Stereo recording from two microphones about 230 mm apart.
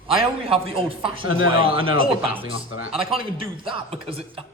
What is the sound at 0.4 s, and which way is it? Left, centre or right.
A man's voice, right.